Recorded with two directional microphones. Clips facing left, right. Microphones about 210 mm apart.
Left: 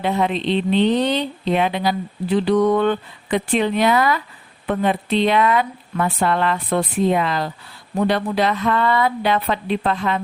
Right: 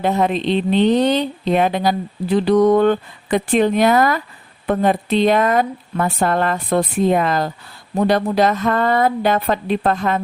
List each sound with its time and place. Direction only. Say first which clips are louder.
0.0 s speech: right 3 dB; 45° right (ahead or behind)